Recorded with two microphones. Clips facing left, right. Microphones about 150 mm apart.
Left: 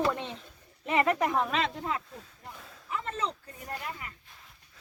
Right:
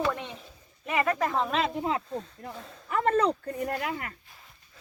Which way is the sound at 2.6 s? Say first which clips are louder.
Right 6 dB; centre (ahead or behind).